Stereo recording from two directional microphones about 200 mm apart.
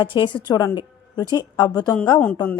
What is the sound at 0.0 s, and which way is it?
A woman's voice, 25° left (ahead or behind).